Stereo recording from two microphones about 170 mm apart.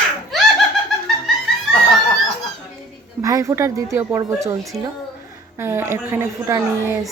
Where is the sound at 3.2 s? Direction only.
20° right (ahead or behind).